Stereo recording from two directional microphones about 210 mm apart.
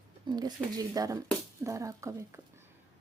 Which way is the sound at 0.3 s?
20° right (ahead or behind).